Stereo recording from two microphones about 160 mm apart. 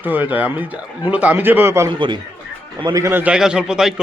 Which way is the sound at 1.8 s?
30° right (ahead or behind).